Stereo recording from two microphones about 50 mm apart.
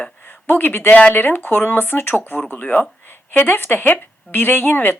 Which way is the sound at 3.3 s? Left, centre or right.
Left.